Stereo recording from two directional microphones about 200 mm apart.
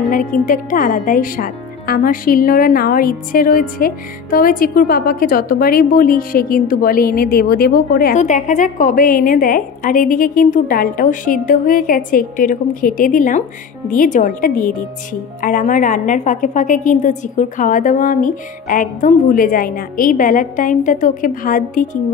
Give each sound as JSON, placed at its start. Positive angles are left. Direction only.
{"t": 0.1, "sound": "a woman's voice", "side_deg": 45}